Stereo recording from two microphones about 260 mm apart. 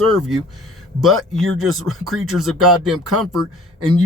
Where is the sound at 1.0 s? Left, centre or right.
Centre.